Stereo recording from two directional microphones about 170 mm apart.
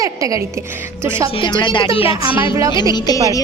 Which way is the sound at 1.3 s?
30° left (ahead or behind).